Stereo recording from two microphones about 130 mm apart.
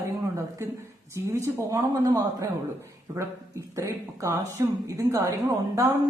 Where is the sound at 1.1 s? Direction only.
20° right (ahead or behind).